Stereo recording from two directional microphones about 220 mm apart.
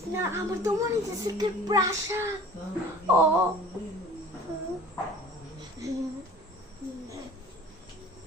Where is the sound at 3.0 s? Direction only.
10° right (ahead or behind).